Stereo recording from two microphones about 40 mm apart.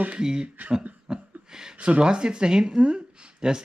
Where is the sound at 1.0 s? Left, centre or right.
Centre.